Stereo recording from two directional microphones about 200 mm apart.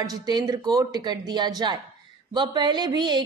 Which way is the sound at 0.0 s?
20° right (ahead or behind).